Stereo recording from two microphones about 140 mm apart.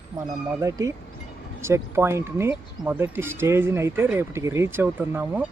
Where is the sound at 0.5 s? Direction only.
25° right (ahead or behind).